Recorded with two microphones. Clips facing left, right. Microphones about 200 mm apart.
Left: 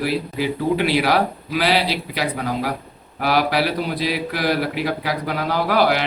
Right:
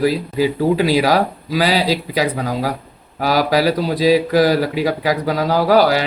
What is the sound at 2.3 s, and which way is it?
Speech, 40° right (ahead or behind).